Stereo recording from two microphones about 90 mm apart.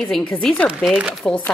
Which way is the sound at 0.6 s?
10° right (ahead or behind).